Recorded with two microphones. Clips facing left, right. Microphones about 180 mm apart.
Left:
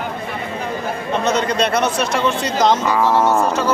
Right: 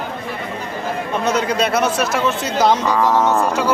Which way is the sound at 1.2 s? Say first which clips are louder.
Even; 10° right (ahead or behind).